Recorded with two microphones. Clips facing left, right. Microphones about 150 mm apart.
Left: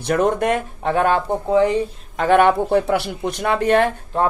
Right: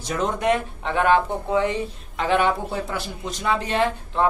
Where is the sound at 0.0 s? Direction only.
55° left (ahead or behind); by 2.2 s 35° left (ahead or behind).